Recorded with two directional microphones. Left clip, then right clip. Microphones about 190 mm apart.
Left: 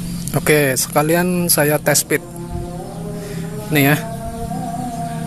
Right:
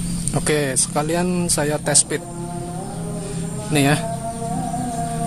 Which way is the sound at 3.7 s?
15° left (ahead or behind).